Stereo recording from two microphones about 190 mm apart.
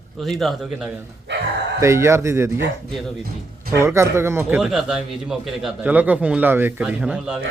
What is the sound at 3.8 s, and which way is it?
A man's voice, 15° right (ahead or behind).